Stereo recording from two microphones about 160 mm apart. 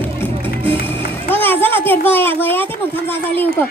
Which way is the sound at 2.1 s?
15° left (ahead or behind).